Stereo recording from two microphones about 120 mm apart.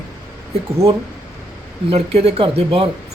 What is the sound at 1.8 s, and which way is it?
Speech, 55° right (ahead or behind).